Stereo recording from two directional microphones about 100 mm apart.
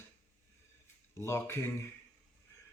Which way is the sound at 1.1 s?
25° left (ahead or behind).